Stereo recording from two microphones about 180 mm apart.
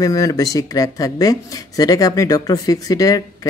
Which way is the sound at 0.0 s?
20° left (ahead or behind).